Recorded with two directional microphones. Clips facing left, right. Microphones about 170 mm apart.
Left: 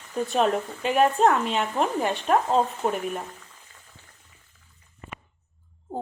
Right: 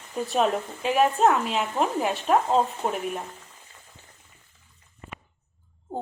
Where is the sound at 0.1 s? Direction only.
Centre (ahead or behind).